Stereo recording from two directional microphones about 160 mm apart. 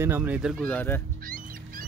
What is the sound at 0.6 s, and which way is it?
Speech, 10° left (ahead or behind).